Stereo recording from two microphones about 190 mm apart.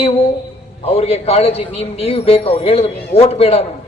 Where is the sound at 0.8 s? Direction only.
35° left (ahead or behind).